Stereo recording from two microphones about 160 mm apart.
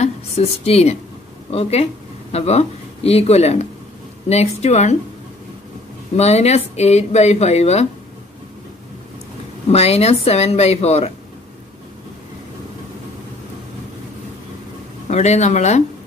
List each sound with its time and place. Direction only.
0.0 s a woman's voice: 40° left (ahead or behind)
6.1 s speech: 40° left (ahead or behind)
9.7 s a woman's voice: 40° left (ahead or behind)
15.0 s speech: 45° left (ahead or behind)